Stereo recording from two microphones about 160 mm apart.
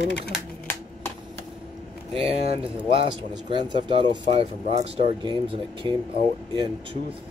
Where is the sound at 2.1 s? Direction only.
35° right (ahead or behind).